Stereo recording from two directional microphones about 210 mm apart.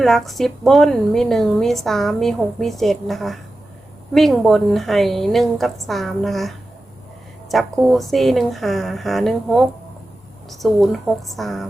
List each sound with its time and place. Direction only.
0.0 s a woman's voice: centre (ahead or behind)
7.5 s a woman's voice: centre (ahead or behind)